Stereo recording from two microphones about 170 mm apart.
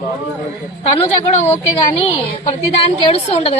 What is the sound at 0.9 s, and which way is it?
Speech, 35° left (ahead or behind).